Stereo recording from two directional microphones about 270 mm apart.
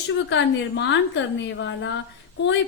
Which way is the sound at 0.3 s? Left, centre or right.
Left.